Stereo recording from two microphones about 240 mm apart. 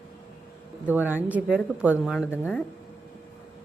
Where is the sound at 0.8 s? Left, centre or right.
Centre.